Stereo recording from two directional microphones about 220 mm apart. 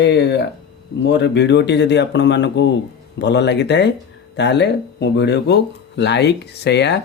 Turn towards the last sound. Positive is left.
turn(degrees=50)  # may be behind; listen again after turning